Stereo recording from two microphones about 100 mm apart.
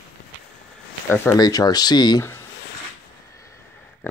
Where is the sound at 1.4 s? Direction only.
40° left (ahead or behind).